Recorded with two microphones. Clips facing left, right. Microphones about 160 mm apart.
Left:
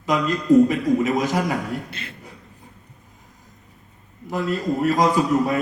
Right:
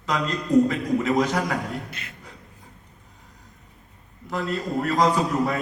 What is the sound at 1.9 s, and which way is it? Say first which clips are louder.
Speech: left 4 dB; 30° left (ahead or behind).